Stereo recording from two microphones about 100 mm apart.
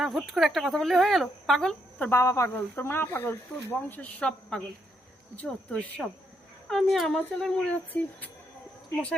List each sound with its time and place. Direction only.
0.0 s speech: centre (ahead or behind)
2.0 s speech: 25° left (ahead or behind)
6.7 s speech: centre (ahead or behind)